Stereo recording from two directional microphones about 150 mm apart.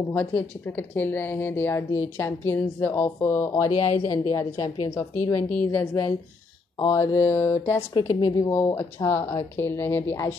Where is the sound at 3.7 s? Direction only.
40° left (ahead or behind).